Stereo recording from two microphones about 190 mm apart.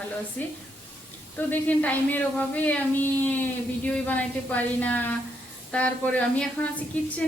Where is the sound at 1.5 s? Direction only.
10° left (ahead or behind).